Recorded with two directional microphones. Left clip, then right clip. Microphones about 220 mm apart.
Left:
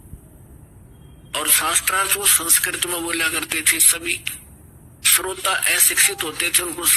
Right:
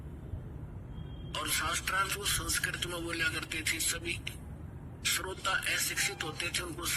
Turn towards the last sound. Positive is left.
turn(degrees=55)  # may be behind; listen again after turning